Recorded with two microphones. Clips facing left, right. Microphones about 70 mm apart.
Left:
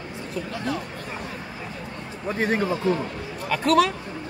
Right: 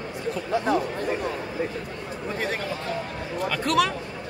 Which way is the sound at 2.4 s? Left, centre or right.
Left.